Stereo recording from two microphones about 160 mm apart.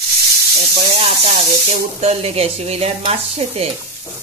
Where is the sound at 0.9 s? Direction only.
35° right (ahead or behind).